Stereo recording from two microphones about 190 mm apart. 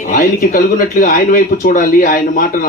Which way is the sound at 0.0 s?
45° left (ahead or behind).